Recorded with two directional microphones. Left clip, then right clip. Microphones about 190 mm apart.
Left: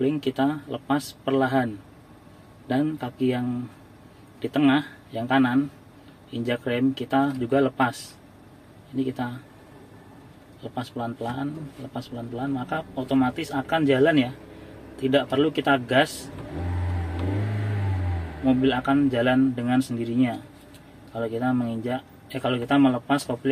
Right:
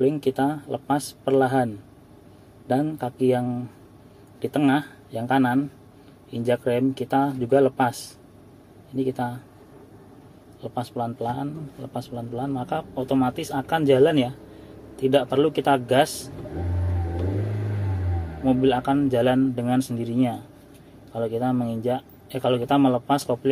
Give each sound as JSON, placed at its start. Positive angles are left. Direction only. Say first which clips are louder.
{"t": 0.0, "sound": "speech", "louder": "right 2 dB", "side_deg": -15}
{"t": 3.0, "sound": "speech", "louder": "right 4 dB", "side_deg": -15}
{"t": 10.6, "sound": "speech", "louder": "right 3 dB", "side_deg": -15}
{"t": 18.4, "sound": "speech", "louder": "right 2 dB", "side_deg": -15}